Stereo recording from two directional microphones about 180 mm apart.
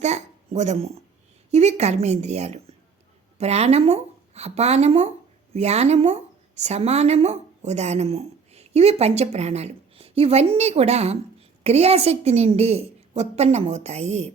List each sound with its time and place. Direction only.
0.0 s a woman's voice: 40° right (ahead or behind)